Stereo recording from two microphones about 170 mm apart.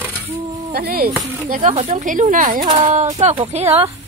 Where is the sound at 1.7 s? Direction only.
40° right (ahead or behind).